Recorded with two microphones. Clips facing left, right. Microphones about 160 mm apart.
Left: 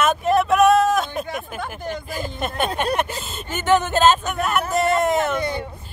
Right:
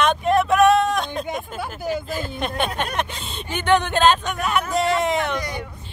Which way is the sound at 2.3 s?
5° left (ahead or behind).